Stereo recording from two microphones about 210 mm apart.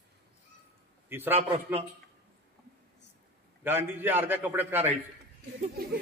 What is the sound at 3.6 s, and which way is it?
A man's voice, 10° right (ahead or behind).